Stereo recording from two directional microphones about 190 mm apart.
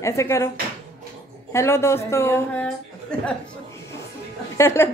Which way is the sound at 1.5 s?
15° left (ahead or behind).